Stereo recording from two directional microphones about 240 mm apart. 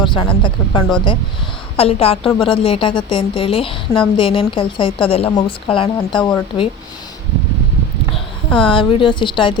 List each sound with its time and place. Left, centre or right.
0.0 s speech: centre
8.5 s speech: left